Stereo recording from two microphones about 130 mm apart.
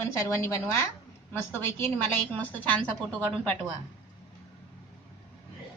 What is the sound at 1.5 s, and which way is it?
A woman's voice, 15° left (ahead or behind).